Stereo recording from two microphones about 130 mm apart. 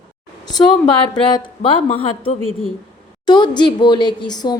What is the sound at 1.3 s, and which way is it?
A woman's voice, 40° left (ahead or behind).